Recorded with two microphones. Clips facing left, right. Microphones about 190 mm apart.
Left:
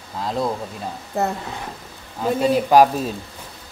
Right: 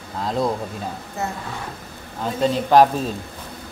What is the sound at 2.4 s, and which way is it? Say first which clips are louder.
Speech: even; 10° left (ahead or behind).